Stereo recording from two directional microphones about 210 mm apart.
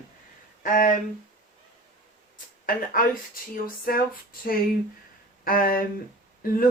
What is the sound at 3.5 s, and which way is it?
Speech, 40° left (ahead or behind).